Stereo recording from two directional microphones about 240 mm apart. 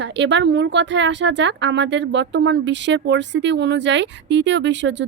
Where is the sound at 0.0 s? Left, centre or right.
Right.